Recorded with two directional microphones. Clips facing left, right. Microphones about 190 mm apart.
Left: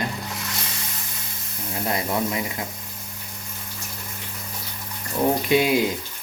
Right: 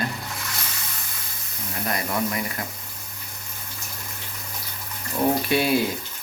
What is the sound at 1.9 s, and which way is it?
Speech, 20° left (ahead or behind).